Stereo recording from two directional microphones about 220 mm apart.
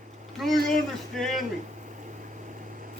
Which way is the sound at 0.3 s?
Centre (ahead or behind).